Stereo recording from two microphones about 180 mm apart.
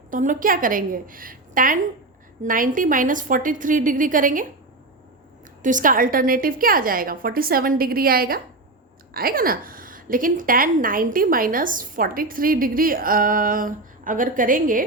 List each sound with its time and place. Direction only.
0.1 s a woman's voice: 45° right (ahead or behind)
5.6 s a woman's voice: 45° right (ahead or behind)